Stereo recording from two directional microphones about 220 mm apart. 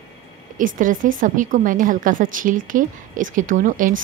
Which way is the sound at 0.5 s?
35° right (ahead or behind).